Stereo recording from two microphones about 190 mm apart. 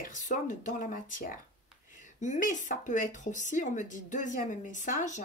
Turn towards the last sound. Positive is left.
turn(degrees=40)  # may be behind; listen again after turning